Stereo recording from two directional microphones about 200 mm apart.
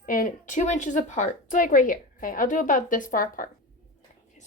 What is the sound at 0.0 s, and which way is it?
A woman's voice, 45° left (ahead or behind).